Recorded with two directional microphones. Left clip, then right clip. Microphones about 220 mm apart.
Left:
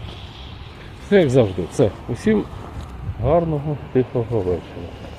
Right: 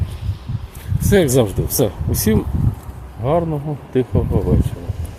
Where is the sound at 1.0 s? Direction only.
25° right (ahead or behind).